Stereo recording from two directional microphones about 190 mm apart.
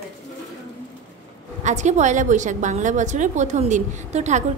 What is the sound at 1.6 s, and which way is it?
A woman's voice, 40° right (ahead or behind).